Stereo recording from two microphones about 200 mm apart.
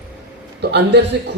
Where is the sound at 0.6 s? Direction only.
55° right (ahead or behind).